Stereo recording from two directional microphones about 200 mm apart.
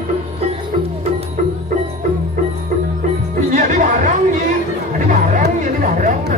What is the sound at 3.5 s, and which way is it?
Music, 40° right (ahead or behind).